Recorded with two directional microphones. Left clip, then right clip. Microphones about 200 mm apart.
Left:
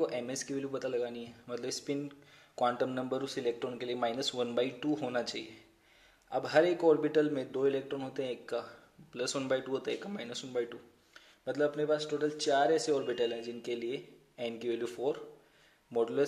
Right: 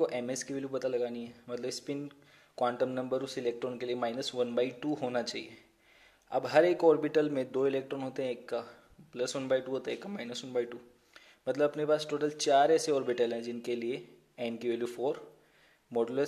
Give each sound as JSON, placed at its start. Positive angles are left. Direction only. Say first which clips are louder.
{"t": 0.0, "sound": "a man's voice", "louder": "right 2 dB", "side_deg": -20}